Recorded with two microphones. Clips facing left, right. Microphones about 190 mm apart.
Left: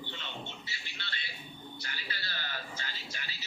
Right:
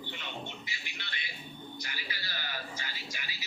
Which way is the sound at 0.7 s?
15° right (ahead or behind).